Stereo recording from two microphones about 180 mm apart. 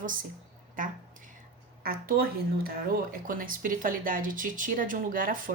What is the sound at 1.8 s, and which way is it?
Speech, 55° right (ahead or behind).